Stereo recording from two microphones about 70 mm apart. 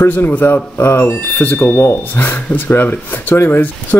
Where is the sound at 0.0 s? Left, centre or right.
Left.